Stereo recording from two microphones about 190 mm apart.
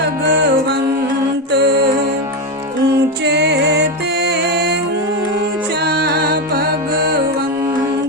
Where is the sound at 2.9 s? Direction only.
60° right (ahead or behind).